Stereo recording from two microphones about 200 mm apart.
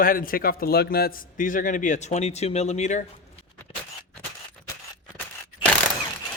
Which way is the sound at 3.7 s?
25° left (ahead or behind).